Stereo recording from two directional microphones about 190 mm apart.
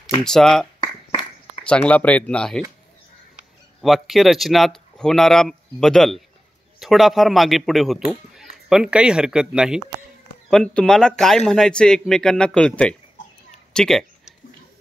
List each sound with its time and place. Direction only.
0.2 s a man's voice: centre (ahead or behind)
0.7 s a sound: 25° left (ahead or behind)
1.7 s a man's voice: 5° left (ahead or behind)